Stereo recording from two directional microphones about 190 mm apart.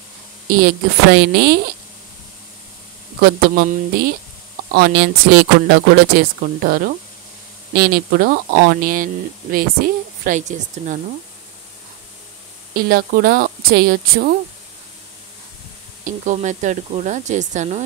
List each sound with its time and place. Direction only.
0.5 s speech: 50° right (ahead or behind)
3.2 s speech: 50° right (ahead or behind)
12.7 s speech: 50° right (ahead or behind)
16.0 s speech: 40° right (ahead or behind)